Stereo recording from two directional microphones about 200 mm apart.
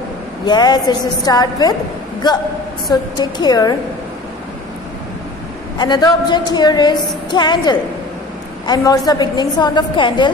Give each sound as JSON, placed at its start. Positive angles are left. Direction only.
{"t": 0.5, "sound": "a woman's voice", "side_deg": 20}
{"t": 2.9, "sound": "a woman's voice", "side_deg": 20}
{"t": 5.8, "sound": "a woman's voice", "side_deg": 20}